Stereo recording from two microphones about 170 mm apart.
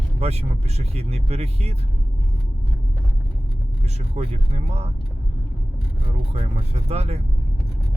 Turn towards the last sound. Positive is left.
turn(degrees=-40)  # may be behind; listen again after turning